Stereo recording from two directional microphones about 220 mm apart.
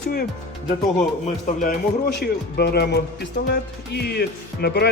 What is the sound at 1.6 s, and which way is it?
Speech, 50° left (ahead or behind).